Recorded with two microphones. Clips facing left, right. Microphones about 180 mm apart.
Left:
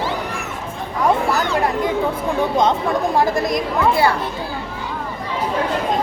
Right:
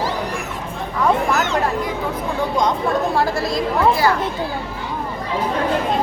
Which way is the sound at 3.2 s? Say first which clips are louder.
Left 2 dB; 20° left (ahead or behind).